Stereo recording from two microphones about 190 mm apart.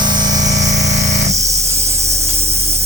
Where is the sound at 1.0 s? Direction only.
35° right (ahead or behind).